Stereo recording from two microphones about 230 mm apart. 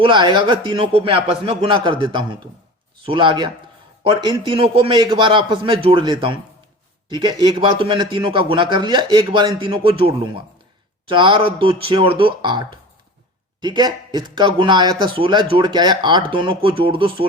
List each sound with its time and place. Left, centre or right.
0.0 s speech: right
11.1 s speech: right